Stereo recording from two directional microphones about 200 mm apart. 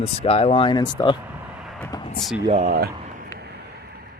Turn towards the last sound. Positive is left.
turn(degrees=-45)  # may be behind; listen again after turning